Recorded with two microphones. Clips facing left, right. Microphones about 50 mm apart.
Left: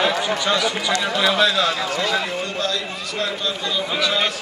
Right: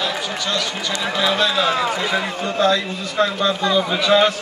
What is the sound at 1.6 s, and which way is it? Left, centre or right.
A man's voice, right.